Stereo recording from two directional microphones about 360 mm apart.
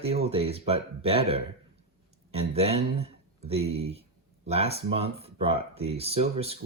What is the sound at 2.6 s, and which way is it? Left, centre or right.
Speech, centre.